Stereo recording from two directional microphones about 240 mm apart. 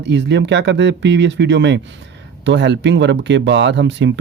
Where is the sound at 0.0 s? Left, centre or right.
Right.